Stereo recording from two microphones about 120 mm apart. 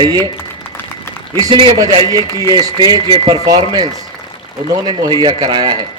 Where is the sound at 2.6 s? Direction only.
35° right (ahead or behind).